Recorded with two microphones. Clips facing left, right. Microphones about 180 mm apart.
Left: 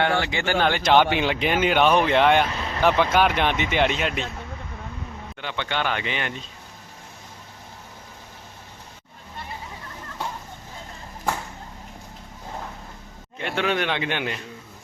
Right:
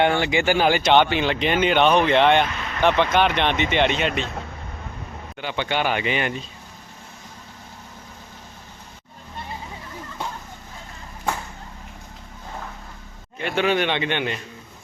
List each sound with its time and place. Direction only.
0.0 s a man's voice: 20° right (ahead or behind); by 2.5 s 5° left (ahead or behind)
2.5 s vehicle: 30° left (ahead or behind)
2.8 s speech: 5° left (ahead or behind)
5.4 s a man's voice: 10° right (ahead or behind)
13.4 s speech: centre (ahead or behind)